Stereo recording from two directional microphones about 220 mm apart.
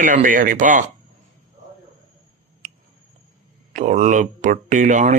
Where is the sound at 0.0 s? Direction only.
35° right (ahead or behind).